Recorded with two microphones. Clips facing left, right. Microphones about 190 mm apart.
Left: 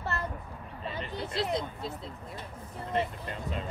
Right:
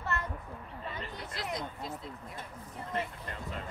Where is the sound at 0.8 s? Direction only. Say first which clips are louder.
Left 6 dB; 25° left (ahead or behind).